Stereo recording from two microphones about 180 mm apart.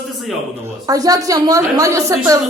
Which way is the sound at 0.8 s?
20° right (ahead or behind).